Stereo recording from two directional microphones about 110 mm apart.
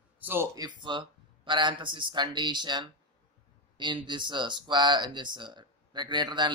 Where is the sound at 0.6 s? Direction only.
45° right (ahead or behind).